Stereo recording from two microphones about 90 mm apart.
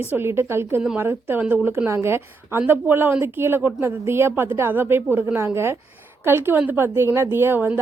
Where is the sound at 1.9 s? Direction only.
30° right (ahead or behind).